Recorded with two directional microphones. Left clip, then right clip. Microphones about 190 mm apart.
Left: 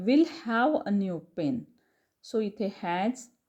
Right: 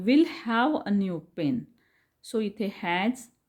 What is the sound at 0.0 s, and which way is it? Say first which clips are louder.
A woman's voice: right 1 dB; 10° right (ahead or behind).